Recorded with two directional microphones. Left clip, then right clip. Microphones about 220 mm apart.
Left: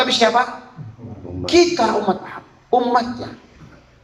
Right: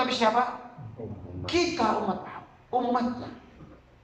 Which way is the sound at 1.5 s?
50° left (ahead or behind).